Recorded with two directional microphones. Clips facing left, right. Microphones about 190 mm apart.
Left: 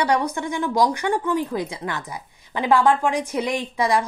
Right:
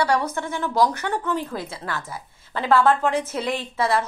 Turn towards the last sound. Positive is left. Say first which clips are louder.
# left 2 dB
turn(degrees=15)  # may be behind; listen again after turning